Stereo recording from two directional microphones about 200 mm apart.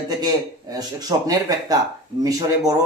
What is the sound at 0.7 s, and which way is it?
A man's voice, 20° right (ahead or behind).